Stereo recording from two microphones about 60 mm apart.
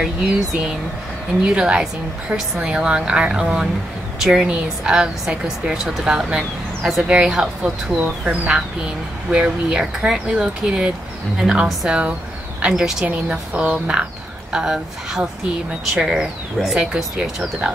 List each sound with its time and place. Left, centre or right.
0.3 s speech: centre
7.1 s speech: centre
13.0 s a woman's voice: right
14.5 s speech: centre